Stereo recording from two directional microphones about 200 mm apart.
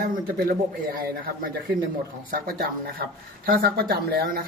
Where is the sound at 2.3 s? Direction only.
45° right (ahead or behind).